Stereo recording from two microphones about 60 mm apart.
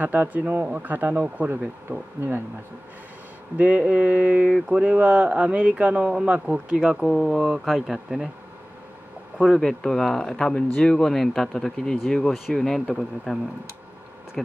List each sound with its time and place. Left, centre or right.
0.0 s speech: right
3.5 s speech: right
4.5 s speech: centre
7.0 s speech: centre
9.6 s speech: centre